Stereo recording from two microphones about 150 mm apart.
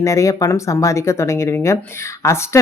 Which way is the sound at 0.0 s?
20° left (ahead or behind).